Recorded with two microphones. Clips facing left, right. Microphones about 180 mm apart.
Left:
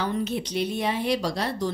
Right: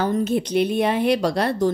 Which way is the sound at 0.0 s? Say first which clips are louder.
Right 6 dB; 45° right (ahead or behind).